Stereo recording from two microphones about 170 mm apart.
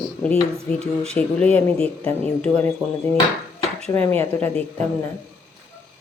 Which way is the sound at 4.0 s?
10° left (ahead or behind).